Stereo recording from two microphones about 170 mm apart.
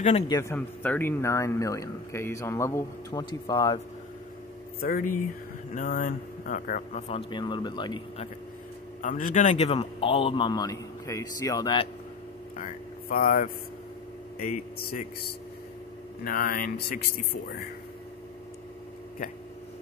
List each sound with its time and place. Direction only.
0.3 s a man's voice: 15° left (ahead or behind)
4.7 s speech: 60° left (ahead or behind); by 7.2 s 40° left (ahead or behind)
7.2 s speech: 25° left (ahead or behind)
9.0 s a man's voice: 45° left (ahead or behind); by 11.9 s 25° left (ahead or behind)
12.5 s speech: 50° left (ahead or behind)
16.3 s speech: 60° left (ahead or behind)